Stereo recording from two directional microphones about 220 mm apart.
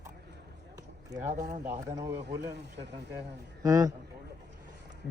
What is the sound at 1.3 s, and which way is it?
Speech, 35° right (ahead or behind).